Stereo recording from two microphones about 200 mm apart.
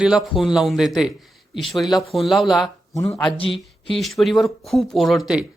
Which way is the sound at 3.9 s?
Centre (ahead or behind).